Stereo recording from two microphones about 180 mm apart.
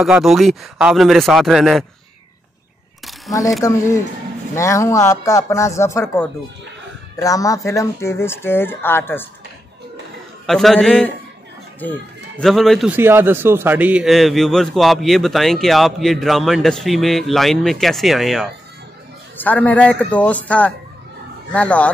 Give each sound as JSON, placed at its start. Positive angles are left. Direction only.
{"t": 0.0, "sound": "a man's voice", "side_deg": 0}
{"t": 3.6, "sound": "speech", "side_deg": 15}
{"t": 10.4, "sound": "a man's voice", "side_deg": 0}
{"t": 12.9, "sound": "a man's voice", "side_deg": -10}